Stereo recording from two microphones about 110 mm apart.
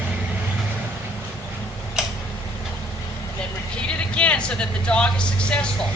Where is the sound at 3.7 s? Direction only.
10° left (ahead or behind).